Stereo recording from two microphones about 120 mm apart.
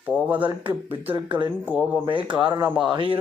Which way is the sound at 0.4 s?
45° right (ahead or behind).